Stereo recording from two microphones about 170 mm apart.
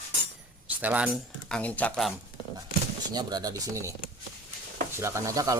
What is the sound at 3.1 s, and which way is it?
Speech, 25° right (ahead or behind).